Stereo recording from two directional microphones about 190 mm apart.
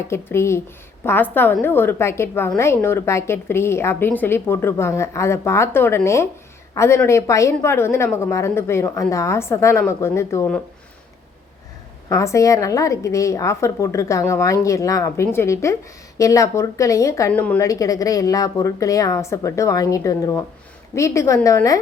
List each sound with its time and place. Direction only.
0.1 s a woman's voice: 15° left (ahead or behind)
12.0 s a woman's voice: 15° left (ahead or behind)